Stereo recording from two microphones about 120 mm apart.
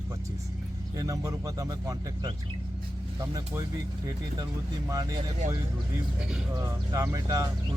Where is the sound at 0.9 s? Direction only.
30° right (ahead or behind).